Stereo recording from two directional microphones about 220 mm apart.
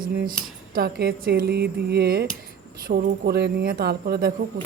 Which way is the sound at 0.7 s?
45° right (ahead or behind).